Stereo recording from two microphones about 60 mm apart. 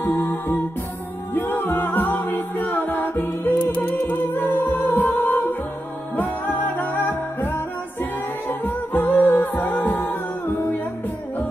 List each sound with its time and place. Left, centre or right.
0.0 s music: left
1.3 s a capella: left
6.1 s music: left